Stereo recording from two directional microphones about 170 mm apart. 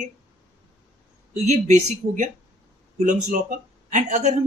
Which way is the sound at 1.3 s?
45° right (ahead or behind).